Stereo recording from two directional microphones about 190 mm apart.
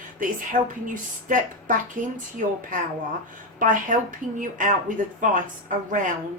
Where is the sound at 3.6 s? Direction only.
45° right (ahead or behind).